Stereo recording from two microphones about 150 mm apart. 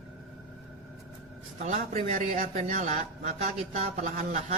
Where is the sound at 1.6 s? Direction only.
50° right (ahead or behind).